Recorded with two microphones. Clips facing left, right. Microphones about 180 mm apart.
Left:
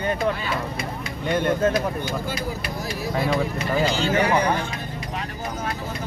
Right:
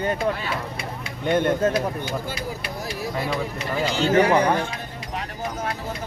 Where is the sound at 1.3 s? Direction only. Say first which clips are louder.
Right 1 dB; 50° right (ahead or behind).